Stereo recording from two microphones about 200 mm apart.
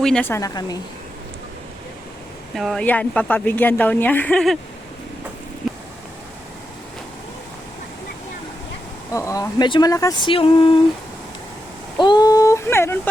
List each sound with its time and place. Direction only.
0.0 s a woman's voice: 5° left (ahead or behind)
2.6 s a woman's voice: centre (ahead or behind)
9.1 s speech: 15° left (ahead or behind)
12.0 s a sound: 20° left (ahead or behind)